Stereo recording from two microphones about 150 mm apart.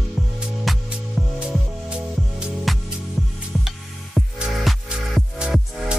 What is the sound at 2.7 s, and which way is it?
Music, centre (ahead or behind).